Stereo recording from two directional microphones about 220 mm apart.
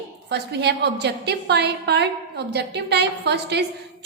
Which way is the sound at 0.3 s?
50° right (ahead or behind).